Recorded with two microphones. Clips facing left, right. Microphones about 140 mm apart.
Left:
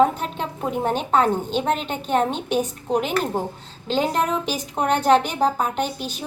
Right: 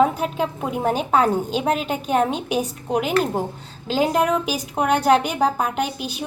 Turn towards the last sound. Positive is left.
turn(degrees=-10)  # may be behind; listen again after turning